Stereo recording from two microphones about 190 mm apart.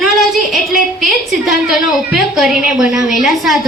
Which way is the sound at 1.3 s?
Centre (ahead or behind).